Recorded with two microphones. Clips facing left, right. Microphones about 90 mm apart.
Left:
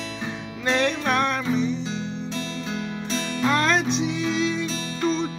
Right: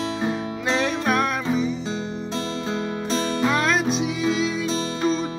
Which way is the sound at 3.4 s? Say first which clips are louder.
Left 2 dB; 5° right (ahead or behind).